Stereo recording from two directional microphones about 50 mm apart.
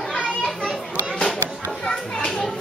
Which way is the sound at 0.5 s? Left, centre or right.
Centre.